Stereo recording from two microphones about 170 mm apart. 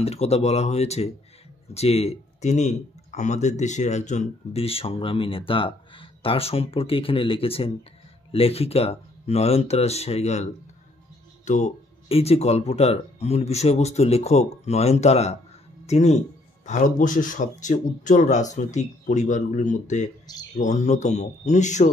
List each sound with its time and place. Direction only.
0.0 s speech: 40° left (ahead or behind)